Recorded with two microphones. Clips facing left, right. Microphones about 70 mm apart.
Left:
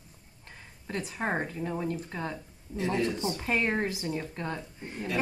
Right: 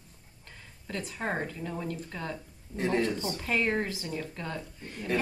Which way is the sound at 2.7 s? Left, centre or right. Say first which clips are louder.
Right 1 dB; right.